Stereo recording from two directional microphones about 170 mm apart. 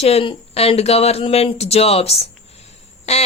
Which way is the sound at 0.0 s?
35° left (ahead or behind).